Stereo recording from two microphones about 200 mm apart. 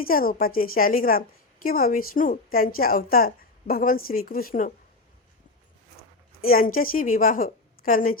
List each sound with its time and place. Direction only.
0.0 s a woman's voice: 45° left (ahead or behind)
6.4 s a woman's voice: 45° left (ahead or behind)